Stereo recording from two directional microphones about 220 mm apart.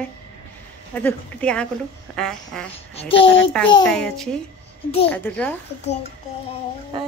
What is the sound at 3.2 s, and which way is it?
Speech, 55° left (ahead or behind).